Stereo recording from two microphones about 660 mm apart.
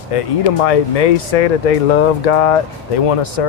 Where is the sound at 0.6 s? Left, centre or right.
Left.